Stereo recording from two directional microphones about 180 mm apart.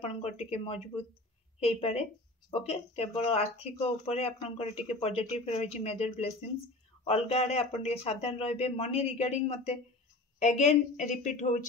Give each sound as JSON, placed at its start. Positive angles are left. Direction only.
{"t": 0.0, "sound": "a man's voice", "side_deg": 35}